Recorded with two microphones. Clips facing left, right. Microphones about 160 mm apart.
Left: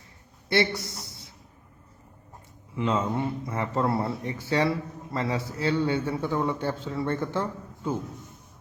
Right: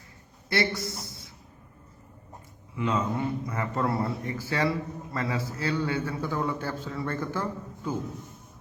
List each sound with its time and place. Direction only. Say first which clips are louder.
0.4 s a man's voice: left 3 dB; 25° left (ahead or behind)
0.9 s a man's voice: right 4 dB; 25° right (ahead or behind)
2.7 s a man's voice: left 2 dB; 25° left (ahead or behind)